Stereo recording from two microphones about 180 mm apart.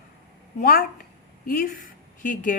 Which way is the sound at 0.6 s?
55° left (ahead or behind).